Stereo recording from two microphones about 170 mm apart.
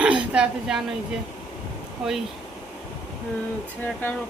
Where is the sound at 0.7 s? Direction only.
5° right (ahead or behind).